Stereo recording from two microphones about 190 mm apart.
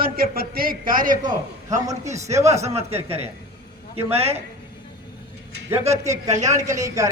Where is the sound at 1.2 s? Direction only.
20° right (ahead or behind).